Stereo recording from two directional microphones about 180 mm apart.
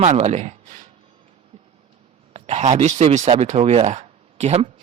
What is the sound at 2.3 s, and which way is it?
Speech, 35° right (ahead or behind).